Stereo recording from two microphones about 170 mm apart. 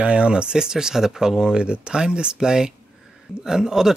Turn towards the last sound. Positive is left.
turn(degrees=-5)  # may be behind; listen again after turning